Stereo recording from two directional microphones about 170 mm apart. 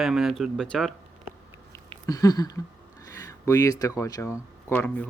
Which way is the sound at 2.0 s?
20° left (ahead or behind).